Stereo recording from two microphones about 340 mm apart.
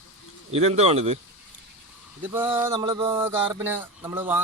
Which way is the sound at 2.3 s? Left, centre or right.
Centre.